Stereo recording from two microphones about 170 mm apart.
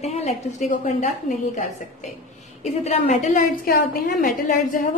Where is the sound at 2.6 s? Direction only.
40° left (ahead or behind).